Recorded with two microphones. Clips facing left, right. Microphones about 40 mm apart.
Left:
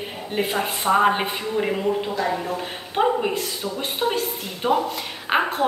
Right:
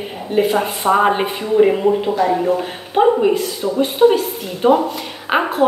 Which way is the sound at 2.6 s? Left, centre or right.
Centre.